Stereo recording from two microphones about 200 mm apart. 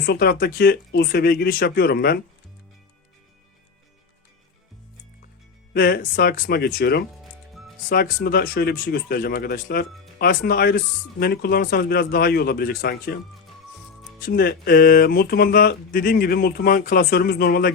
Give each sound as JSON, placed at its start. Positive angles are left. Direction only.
{"t": 0.0, "sound": "music", "side_deg": 50}
{"t": 5.7, "sound": "music", "side_deg": 45}
{"t": 14.2, "sound": "music", "side_deg": 50}